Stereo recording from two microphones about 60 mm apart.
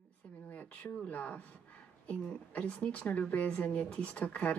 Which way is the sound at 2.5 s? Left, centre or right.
Left.